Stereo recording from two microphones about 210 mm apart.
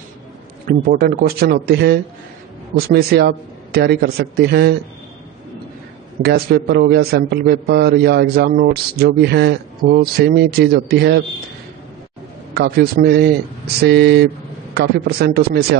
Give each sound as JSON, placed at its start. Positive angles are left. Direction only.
{"t": 0.7, "sound": "a man's voice", "side_deg": -45}
{"t": 6.2, "sound": "a man's voice", "side_deg": -50}
{"t": 12.5, "sound": "a man's voice", "side_deg": -45}